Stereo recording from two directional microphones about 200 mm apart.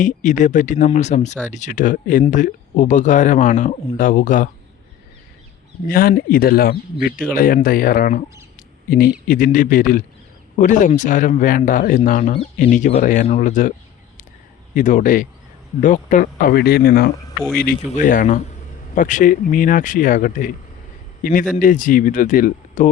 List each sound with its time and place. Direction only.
0.0 s speech: 40° left (ahead or behind)
5.9 s speech: 45° left (ahead or behind)
9.2 s speech: 45° left (ahead or behind)
14.8 s speech: 40° left (ahead or behind)
21.5 s speech: 45° left (ahead or behind)